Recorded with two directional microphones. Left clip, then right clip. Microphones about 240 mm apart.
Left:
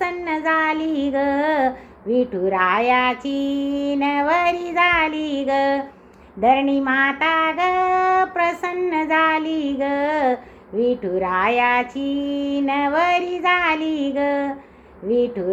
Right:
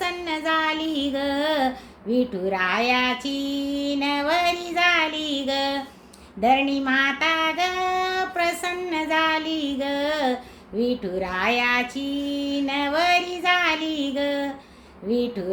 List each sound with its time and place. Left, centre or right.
0.0 s child singing: centre